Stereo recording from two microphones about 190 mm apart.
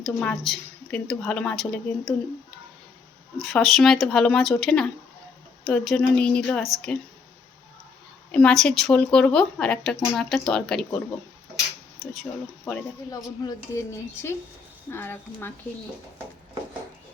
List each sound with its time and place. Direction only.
0.0 s speech: 5° left (ahead or behind)
3.4 s speech: centre (ahead or behind)
8.3 s speech: 5° left (ahead or behind)
13.1 s speech: 15° left (ahead or behind)